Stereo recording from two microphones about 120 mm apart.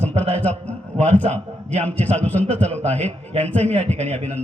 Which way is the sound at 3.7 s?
70° right (ahead or behind).